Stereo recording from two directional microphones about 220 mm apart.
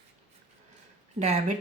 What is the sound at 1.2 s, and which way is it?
Speech, 30° right (ahead or behind).